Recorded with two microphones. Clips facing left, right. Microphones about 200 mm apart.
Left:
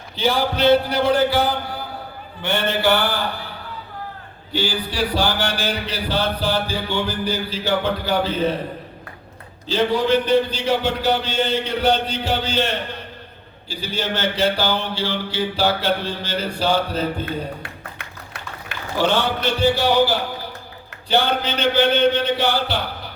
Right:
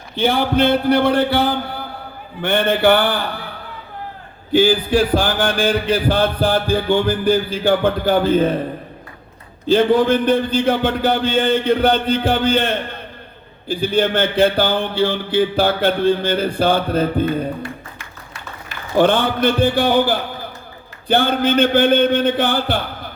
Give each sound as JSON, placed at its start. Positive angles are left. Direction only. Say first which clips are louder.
{"t": 0.2, "sound": "a sound", "louder": "right 3 dB", "side_deg": -55}
{"t": 2.4, "sound": "a sound", "louder": "right 5 dB", "side_deg": -55}
{"t": 4.5, "sound": "a man's voice", "louder": "right 10 dB", "side_deg": -50}
{"t": 9.6, "sound": "a man's voice", "louder": "right 5 dB", "side_deg": -55}
{"t": 17.6, "sound": "music", "louder": "right 6 dB", "side_deg": 60}
{"t": 18.9, "sound": "a man's voice", "louder": "right 5 dB", "side_deg": -55}